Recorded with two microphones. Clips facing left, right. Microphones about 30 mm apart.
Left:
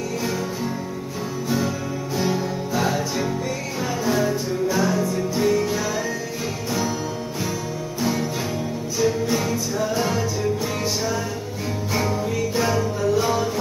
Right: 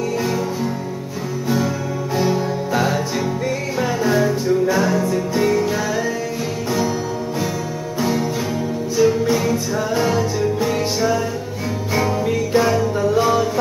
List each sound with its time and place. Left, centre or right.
2.1 s music: centre
2.7 s music: right
4.1 s music: centre
8.0 s music: centre